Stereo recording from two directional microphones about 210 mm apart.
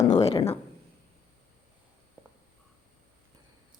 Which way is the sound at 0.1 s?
30° left (ahead or behind).